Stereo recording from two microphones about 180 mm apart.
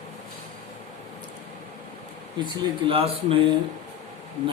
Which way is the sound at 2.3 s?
25° right (ahead or behind).